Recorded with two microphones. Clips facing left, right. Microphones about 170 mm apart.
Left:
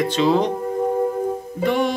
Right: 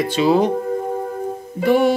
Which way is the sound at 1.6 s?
5° right (ahead or behind).